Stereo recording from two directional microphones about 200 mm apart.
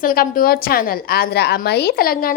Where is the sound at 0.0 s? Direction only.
45° left (ahead or behind).